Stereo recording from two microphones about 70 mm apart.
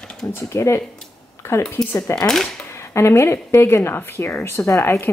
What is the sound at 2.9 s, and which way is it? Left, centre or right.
A woman's voice, left.